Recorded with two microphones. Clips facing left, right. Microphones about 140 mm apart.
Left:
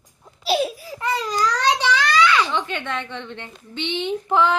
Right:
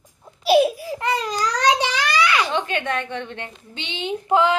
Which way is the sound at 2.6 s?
55° right (ahead or behind).